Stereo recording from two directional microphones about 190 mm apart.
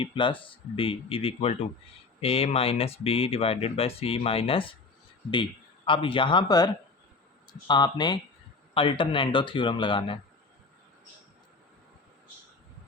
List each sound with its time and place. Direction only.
0.0 s speech: 25° left (ahead or behind)
7.7 s speech: 20° left (ahead or behind)